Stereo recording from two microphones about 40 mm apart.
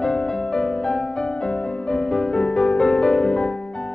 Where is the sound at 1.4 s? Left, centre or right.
Left.